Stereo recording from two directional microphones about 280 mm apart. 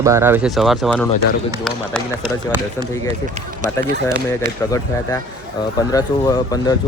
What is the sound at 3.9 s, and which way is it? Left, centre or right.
Speech, right.